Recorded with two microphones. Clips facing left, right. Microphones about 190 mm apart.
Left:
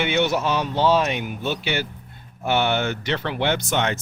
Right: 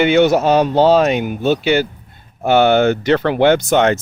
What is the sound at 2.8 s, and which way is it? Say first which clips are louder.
Speech: right 11 dB; 40° right (ahead or behind).